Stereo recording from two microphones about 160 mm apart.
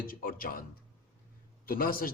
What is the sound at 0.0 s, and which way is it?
Speech, 65° left (ahead or behind).